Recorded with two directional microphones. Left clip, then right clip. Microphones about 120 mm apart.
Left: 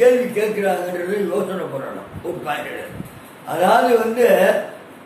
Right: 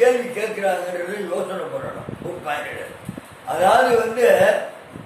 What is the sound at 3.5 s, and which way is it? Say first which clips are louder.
Speech: left 1 dB; 20° left (ahead or behind).